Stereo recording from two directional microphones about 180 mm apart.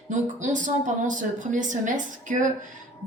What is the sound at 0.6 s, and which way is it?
A woman's voice, 45° right (ahead or behind).